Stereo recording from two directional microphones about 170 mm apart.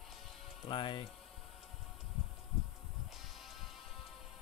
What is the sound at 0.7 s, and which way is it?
Speech, 30° left (ahead or behind).